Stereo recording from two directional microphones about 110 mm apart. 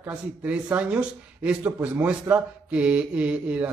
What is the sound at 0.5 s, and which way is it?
Speech, 15° right (ahead or behind).